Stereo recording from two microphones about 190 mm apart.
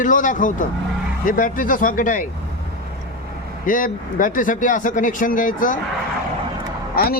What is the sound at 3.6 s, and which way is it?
Speech, 45° left (ahead or behind).